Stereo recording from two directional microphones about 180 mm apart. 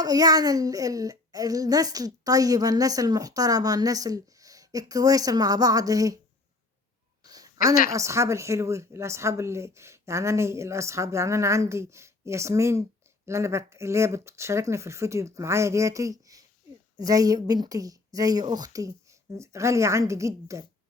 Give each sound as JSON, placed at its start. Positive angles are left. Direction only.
{"t": 0.0, "sound": "a child's voice", "side_deg": -20}
{"t": 7.3, "sound": "a sound", "side_deg": -20}
{"t": 7.9, "sound": "a child's voice", "side_deg": -15}